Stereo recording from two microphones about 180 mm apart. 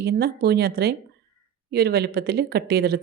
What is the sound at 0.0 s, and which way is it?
Speech, 65° right (ahead or behind).